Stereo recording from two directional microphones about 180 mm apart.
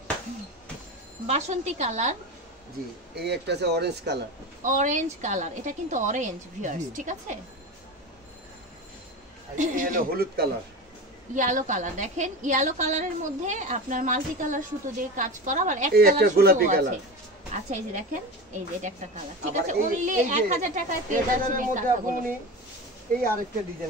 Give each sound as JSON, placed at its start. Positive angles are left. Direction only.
{"t": 1.2, "sound": "a woman's voice", "side_deg": -40}
{"t": 3.2, "sound": "speech", "side_deg": -65}
{"t": 4.6, "sound": "a woman's voice", "side_deg": -45}
{"t": 9.6, "sound": "a woman's voice", "side_deg": -45}
{"t": 11.3, "sound": "a woman's voice", "side_deg": -45}